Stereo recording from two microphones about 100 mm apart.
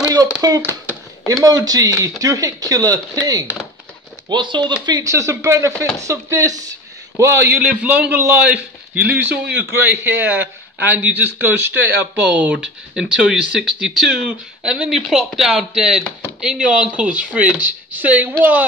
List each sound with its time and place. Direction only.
0.4 s speech: 40° right (ahead or behind)
5.0 s a man's voice: 30° right (ahead or behind)
7.5 s a man's voice: 10° right (ahead or behind)